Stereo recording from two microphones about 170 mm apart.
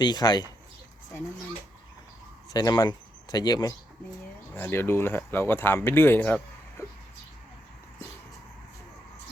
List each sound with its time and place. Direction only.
0.0 s speech: 25° left (ahead or behind)
2.5 s speech: 20° left (ahead or behind)